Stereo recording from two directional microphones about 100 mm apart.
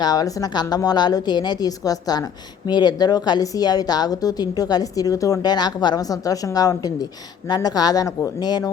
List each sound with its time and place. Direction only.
0.0 s a woman's voice: 40° left (ahead or behind)